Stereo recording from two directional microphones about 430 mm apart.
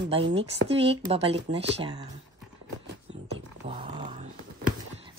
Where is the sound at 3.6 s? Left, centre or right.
Centre.